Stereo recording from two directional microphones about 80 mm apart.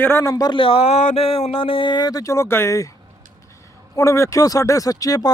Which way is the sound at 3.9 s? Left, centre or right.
Left.